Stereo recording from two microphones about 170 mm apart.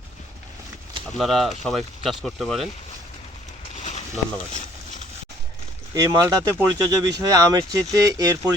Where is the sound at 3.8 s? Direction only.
40° left (ahead or behind).